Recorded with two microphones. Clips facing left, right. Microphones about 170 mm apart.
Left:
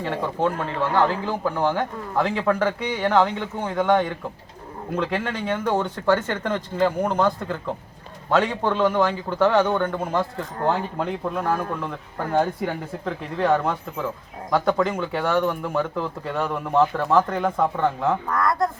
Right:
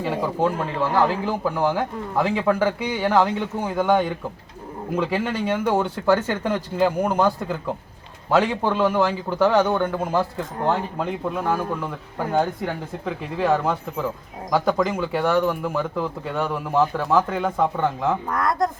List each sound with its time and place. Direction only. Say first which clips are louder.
0.0 s a man's voice: right 2 dB; 10° right (ahead or behind)
18.3 s speech: even; 20° right (ahead or behind)